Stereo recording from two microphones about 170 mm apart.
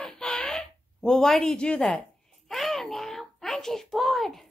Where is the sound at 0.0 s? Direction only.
5° left (ahead or behind).